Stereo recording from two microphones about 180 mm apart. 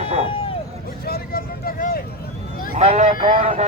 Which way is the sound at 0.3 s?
30° left (ahead or behind).